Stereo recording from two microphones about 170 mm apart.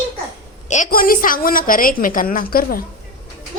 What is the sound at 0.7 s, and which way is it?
A woman's voice, 50° left (ahead or behind).